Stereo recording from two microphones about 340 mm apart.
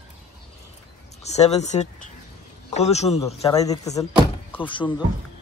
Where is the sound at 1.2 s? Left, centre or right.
Centre.